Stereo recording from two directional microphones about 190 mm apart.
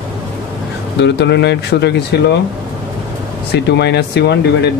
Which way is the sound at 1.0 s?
65° left (ahead or behind).